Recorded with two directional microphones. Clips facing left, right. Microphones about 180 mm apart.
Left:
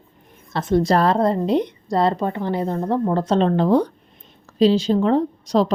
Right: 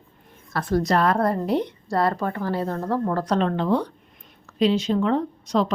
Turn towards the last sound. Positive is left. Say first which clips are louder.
# left 4 dB
turn(degrees=35)  # may be behind; listen again after turning